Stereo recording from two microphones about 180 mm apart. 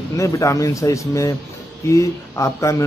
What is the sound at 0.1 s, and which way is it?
Speech, 15° left (ahead or behind).